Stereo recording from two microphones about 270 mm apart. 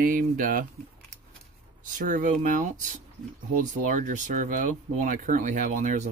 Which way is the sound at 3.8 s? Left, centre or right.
Right.